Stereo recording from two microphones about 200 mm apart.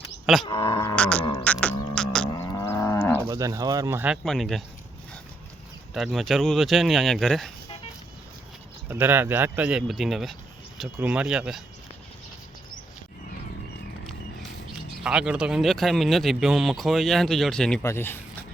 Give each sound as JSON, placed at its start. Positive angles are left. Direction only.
{"t": 0.4, "sound": "speech", "side_deg": 25}
{"t": 0.9, "sound": "a sound", "side_deg": 5}
{"t": 1.2, "sound": "a sound", "side_deg": 25}
{"t": 1.5, "sound": "a sound", "side_deg": 5}
{"t": 2.3, "sound": "cattle", "side_deg": 15}
{"t": 3.2, "sound": "speech", "side_deg": -15}
{"t": 5.9, "sound": "speech", "side_deg": 0}
{"t": 8.9, "sound": "speech", "side_deg": -10}
{"t": 15.0, "sound": "speech", "side_deg": -5}